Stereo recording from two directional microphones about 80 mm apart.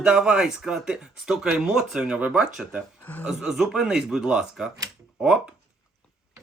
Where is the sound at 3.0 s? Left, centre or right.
Left.